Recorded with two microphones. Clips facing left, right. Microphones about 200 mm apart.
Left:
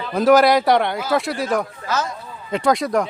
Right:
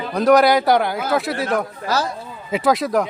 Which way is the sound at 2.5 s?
5° right (ahead or behind).